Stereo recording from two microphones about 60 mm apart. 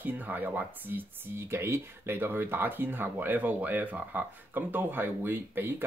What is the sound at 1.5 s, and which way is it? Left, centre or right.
Speech, right.